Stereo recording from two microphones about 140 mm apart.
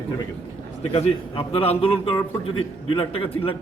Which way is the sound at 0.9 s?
45° left (ahead or behind).